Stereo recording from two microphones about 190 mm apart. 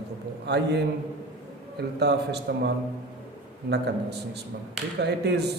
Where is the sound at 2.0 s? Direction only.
60° right (ahead or behind).